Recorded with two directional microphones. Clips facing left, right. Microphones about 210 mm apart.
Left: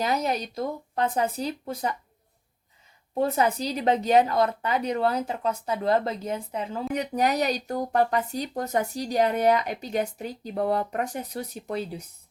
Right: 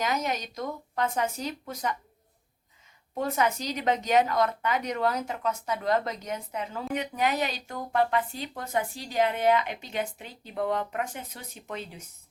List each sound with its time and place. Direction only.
0.0 s a woman's voice: 35° left (ahead or behind)
3.2 s a woman's voice: 35° left (ahead or behind)